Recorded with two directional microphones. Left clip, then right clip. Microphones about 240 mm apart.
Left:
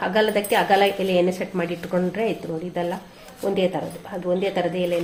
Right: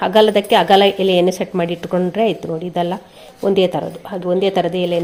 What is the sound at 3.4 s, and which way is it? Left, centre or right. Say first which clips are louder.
A woman's voice: right 7 dB; right.